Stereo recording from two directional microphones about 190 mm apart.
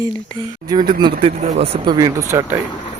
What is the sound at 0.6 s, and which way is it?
Speech, 20° right (ahead or behind).